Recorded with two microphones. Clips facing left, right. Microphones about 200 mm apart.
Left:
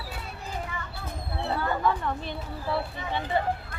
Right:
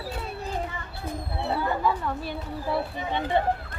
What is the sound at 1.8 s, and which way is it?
Speech, 5° right (ahead or behind).